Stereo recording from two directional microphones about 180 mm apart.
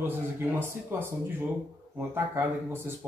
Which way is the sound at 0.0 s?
10° right (ahead or behind).